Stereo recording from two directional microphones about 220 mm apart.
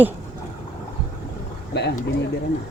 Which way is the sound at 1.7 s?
50° left (ahead or behind).